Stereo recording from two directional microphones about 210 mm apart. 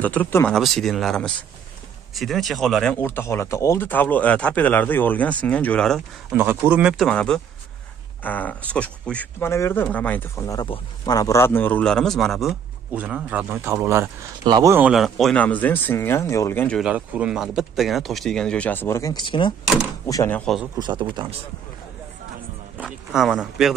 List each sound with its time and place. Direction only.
0.0 s speech: 5° left (ahead or behind)
6.3 s speech: 10° right (ahead or behind); by 16.8 s 10° left (ahead or behind)
16.8 s speech: 5° right (ahead or behind); by 19.5 s 20° left (ahead or behind)
20.1 s speech: 10° left (ahead or behind)
20.8 s speech: 20° right (ahead or behind)
22.8 s speech: 5° right (ahead or behind)